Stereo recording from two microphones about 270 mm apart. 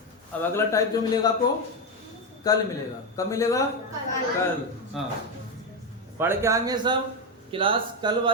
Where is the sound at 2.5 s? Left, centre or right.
Centre.